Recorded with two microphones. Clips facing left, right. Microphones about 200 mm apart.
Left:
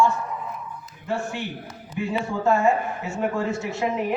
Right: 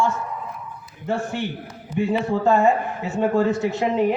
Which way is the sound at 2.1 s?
35° right (ahead or behind).